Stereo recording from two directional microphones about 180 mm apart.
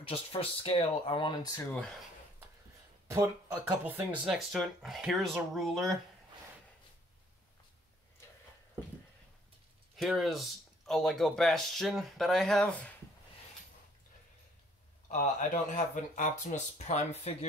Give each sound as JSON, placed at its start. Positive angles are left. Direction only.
{"t": 0.1, "sound": "speech", "side_deg": 30}
{"t": 3.1, "sound": "speech", "side_deg": -15}
{"t": 9.9, "sound": "speech", "side_deg": 0}
{"t": 15.0, "sound": "speech", "side_deg": 45}